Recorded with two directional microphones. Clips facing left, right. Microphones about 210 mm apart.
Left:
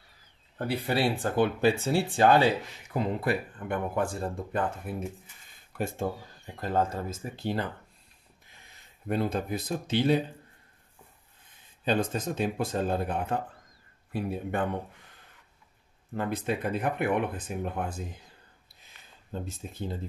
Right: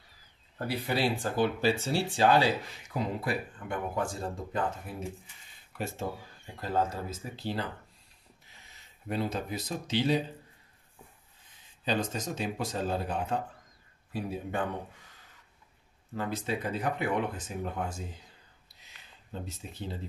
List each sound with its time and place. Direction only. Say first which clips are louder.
0.8 s speech: left 2 dB; 60° left (ahead or behind)
9.1 s speech: left 4 dB; 50° left (ahead or behind)
11.8 s speech: left 4 dB; 55° left (ahead or behind)
16.2 s speech: left 3 dB; 55° left (ahead or behind)
19.4 s speech: left 4 dB; 50° left (ahead or behind)